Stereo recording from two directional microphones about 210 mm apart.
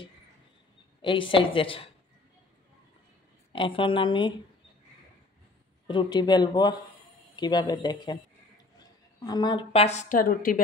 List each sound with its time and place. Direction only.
1.0 s speech: 25° left (ahead or behind)
3.5 s speech: 25° left (ahead or behind)
5.9 s speech: 20° left (ahead or behind); by 10.6 s 40° left (ahead or behind)